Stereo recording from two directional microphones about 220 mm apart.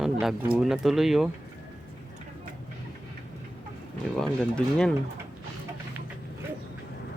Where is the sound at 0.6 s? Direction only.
Centre (ahead or behind).